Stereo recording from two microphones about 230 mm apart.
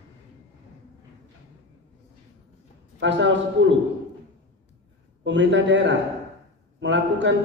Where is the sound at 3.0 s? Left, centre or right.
Right.